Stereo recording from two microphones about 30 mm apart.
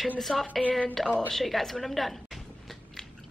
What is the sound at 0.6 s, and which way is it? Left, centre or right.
Speech, left.